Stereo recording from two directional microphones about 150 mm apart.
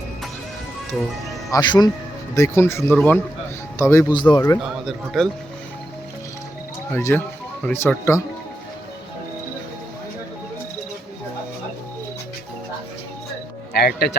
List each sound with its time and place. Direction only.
1.5 s speech: 25° left (ahead or behind)
4.1 s a man's voice: 30° left (ahead or behind)
4.6 s a man's voice: centre (ahead or behind)
6.9 s speech: 15° left (ahead or behind)
13.7 s speech: 90° left